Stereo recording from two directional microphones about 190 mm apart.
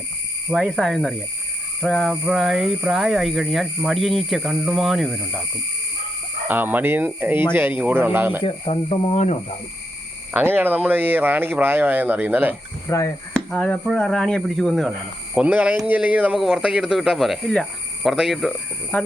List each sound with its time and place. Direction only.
0.5 s speech: centre (ahead or behind)
6.5 s speech: 10° right (ahead or behind)
8.4 s speech: 30° left (ahead or behind)
10.3 s speech: 10° right (ahead or behind)
12.9 s chop: 15° left (ahead or behind)
13.3 s speech: 5° left (ahead or behind)